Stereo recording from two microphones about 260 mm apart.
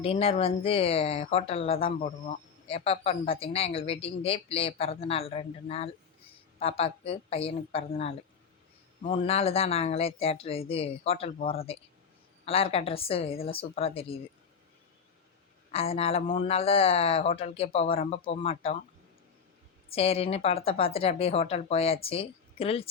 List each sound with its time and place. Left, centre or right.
0.0 s speech: left
15.7 s speech: left
19.9 s speech: left